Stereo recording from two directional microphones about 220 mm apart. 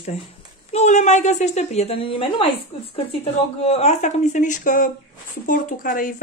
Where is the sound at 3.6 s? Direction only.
30° left (ahead or behind).